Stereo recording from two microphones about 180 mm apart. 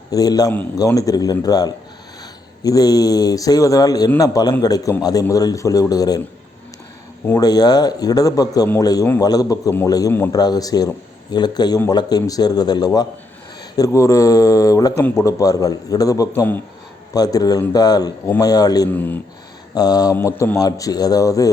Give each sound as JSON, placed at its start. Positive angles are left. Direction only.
{"t": 0.1, "sound": "a man's voice", "side_deg": 20}
{"t": 7.3, "sound": "a man's voice", "side_deg": 20}
{"t": 18.9, "sound": "speech", "side_deg": 10}
{"t": 19.7, "sound": "a man's voice", "side_deg": 20}